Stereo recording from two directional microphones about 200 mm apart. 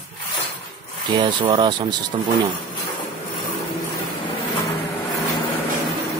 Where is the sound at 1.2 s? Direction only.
20° right (ahead or behind).